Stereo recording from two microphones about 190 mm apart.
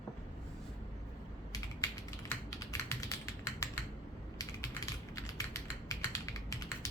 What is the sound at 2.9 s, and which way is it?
Typing, 15° left (ahead or behind).